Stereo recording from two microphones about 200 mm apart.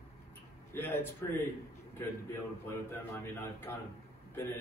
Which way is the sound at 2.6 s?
15° left (ahead or behind).